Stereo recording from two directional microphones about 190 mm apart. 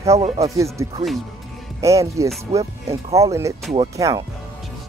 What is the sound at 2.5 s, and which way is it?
Speech, 35° right (ahead or behind).